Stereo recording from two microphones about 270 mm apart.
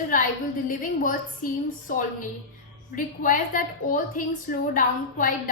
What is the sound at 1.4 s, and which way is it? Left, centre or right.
A woman's voice, left.